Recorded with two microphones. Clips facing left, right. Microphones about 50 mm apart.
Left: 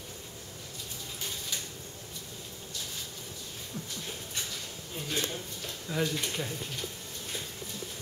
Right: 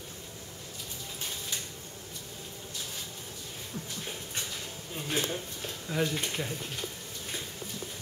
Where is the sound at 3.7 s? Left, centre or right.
Right.